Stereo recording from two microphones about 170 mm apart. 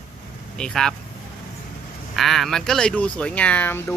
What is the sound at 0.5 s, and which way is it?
Speech, 5° left (ahead or behind).